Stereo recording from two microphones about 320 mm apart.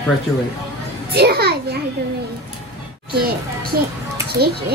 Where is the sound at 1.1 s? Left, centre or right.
Right.